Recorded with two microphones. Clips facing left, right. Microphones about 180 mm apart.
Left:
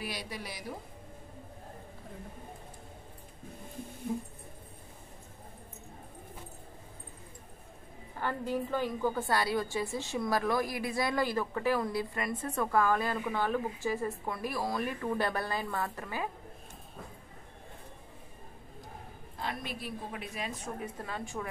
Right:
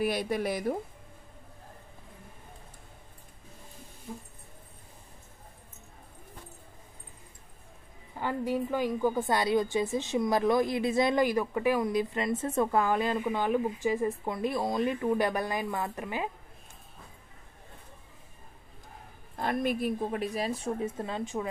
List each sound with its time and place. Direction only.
0.0 s a woman's voice: 50° right (ahead or behind)
8.2 s a woman's voice: 15° right (ahead or behind)
19.3 s a woman's voice: 50° right (ahead or behind); by 21.5 s 20° right (ahead or behind)